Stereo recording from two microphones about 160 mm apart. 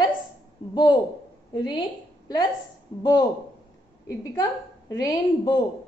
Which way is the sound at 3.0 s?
25° left (ahead or behind).